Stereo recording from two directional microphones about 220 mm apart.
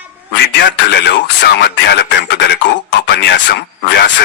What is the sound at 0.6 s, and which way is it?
Speech, 50° left (ahead or behind).